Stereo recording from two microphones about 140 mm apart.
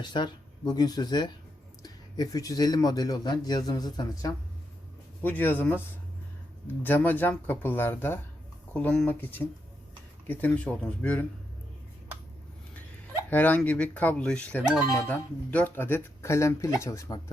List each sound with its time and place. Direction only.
0.0 s speech: 30° left (ahead or behind)
5.2 s speech: 15° left (ahead or behind)
6.8 s speech: 15° left (ahead or behind)
13.3 s speech: 10° left (ahead or behind)